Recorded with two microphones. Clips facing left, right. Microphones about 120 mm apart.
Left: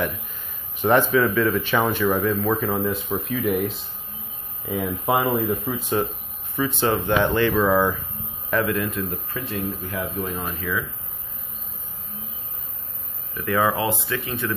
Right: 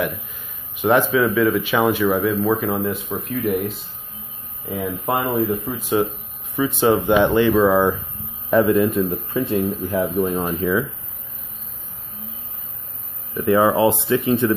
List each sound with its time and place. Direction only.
0.7 s speech: 5° right (ahead or behind)
4.6 s speech: centre (ahead or behind)
6.5 s speech: 15° right (ahead or behind)
13.4 s speech: 25° right (ahead or behind)